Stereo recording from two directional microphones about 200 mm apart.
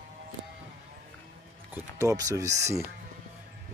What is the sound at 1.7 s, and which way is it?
Speech, 15° right (ahead or behind).